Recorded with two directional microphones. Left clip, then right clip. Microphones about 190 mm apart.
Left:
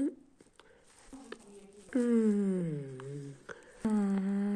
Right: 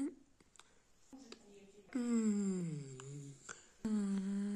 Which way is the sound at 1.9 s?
35° right (ahead or behind).